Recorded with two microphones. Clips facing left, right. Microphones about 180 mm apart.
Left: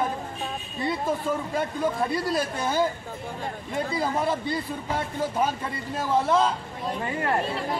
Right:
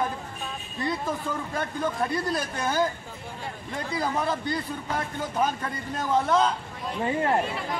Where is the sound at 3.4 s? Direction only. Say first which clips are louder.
Left 4 dB; 45° left (ahead or behind).